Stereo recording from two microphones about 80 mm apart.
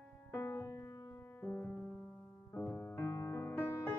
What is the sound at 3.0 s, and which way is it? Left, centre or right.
Music, left.